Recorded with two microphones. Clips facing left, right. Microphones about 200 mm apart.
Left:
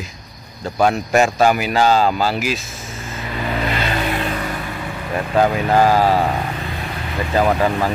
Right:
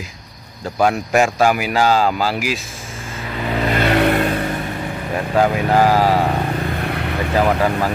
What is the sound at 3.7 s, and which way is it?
Vehicle, 60° right (ahead or behind).